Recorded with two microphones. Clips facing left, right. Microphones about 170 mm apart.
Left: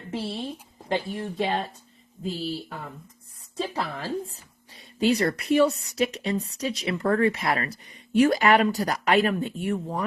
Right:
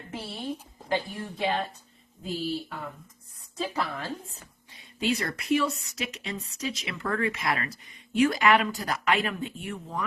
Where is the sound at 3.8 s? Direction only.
30° left (ahead or behind).